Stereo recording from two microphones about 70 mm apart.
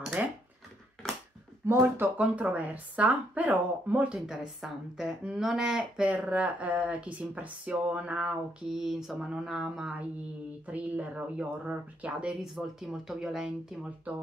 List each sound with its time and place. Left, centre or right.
0.2 s speech: right
1.7 s speech: right
2.1 s speech: right
4.3 s speech: centre
6.0 s speech: centre
10.7 s speech: right